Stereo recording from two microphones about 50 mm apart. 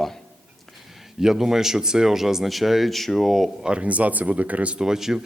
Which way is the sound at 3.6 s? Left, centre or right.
Right.